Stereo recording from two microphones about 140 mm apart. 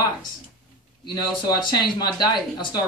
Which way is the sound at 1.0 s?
30° left (ahead or behind).